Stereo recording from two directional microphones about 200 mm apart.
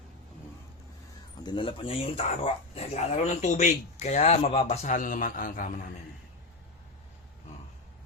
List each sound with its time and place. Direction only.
1.5 s speech: 25° left (ahead or behind); by 5.7 s 40° left (ahead or behind)